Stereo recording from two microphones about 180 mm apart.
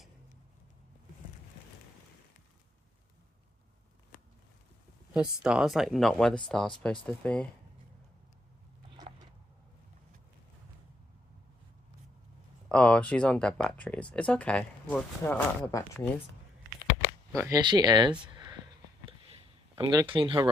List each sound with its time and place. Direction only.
5.1 s speech: 5° right (ahead or behind)
12.6 s speech: 5° left (ahead or behind)
17.3 s speech: 15° right (ahead or behind)
18.2 s a sound: 25° right (ahead or behind)